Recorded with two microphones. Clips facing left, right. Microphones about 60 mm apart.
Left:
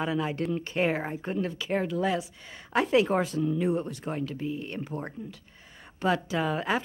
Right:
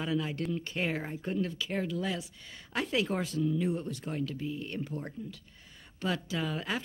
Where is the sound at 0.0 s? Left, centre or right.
Left.